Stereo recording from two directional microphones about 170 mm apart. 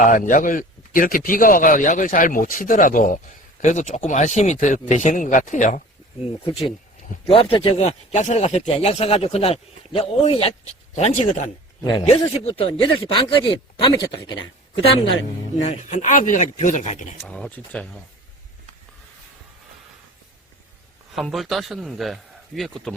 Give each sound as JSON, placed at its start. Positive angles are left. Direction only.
{"t": 0.0, "sound": "speech", "side_deg": 50}
{"t": 7.3, "sound": "speech", "side_deg": 35}
{"t": 11.8, "sound": "speech", "side_deg": 25}
{"t": 15.6, "sound": "speech", "side_deg": 45}
{"t": 17.2, "sound": "speech", "side_deg": 5}
{"t": 21.2, "sound": "a man's voice", "side_deg": 0}